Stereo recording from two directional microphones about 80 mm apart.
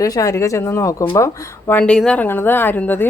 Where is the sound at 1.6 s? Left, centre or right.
Centre.